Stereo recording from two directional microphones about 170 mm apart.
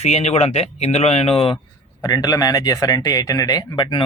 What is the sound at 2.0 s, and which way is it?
Speech, 20° left (ahead or behind).